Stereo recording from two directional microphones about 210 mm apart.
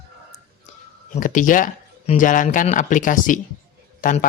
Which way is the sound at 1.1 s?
40° left (ahead or behind).